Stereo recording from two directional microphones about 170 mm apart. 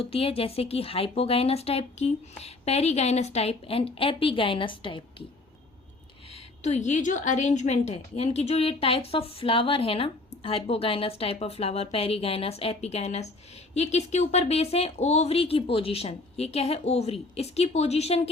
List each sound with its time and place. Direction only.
0.0 s a woman's voice: 35° left (ahead or behind)
6.6 s a woman's voice: 45° left (ahead or behind)